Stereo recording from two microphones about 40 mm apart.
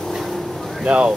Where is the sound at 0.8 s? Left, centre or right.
Right.